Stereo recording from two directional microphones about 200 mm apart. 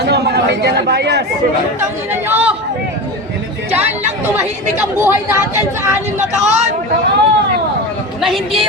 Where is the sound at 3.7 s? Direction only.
30° right (ahead or behind).